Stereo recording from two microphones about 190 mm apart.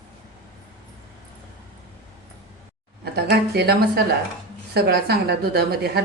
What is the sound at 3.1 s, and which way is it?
A woman's voice, 55° right (ahead or behind).